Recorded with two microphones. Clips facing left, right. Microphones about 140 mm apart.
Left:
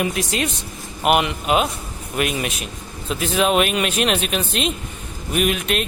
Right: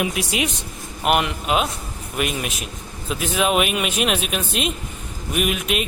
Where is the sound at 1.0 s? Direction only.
Centre (ahead or behind).